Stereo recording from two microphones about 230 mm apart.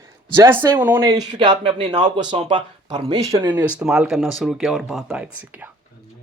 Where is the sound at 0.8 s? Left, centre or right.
Centre.